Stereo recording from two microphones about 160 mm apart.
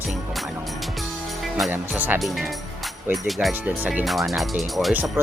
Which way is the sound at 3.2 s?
Centre (ahead or behind).